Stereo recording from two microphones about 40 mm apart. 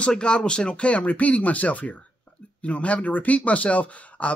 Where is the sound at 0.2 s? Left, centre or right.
Left.